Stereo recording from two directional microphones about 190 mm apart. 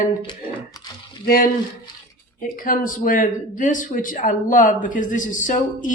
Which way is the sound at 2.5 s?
45° left (ahead or behind).